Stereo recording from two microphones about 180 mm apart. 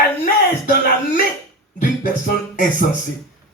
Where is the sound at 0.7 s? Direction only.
55° left (ahead or behind).